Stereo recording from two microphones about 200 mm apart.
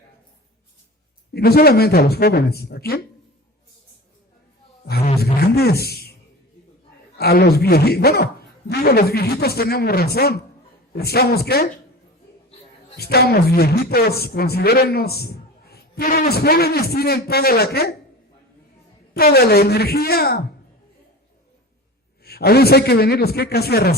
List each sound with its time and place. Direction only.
1.3 s speech: 50° left (ahead or behind)
5.2 s speech: 50° left (ahead or behind)
7.2 s speech: 50° left (ahead or behind)
13.0 s speech: 50° left (ahead or behind)
19.1 s speech: 50° left (ahead or behind)
22.2 s speech: 50° left (ahead or behind)